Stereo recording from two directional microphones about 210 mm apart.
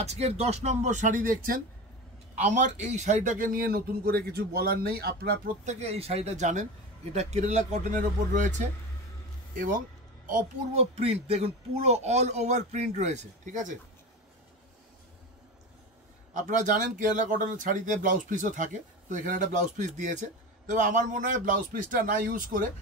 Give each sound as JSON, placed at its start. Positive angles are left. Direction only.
{"t": 0.0, "sound": "a man's voice", "side_deg": -30}
{"t": 5.7, "sound": "speech", "side_deg": -30}
{"t": 10.2, "sound": "speech", "side_deg": -35}
{"t": 16.3, "sound": "speech", "side_deg": -35}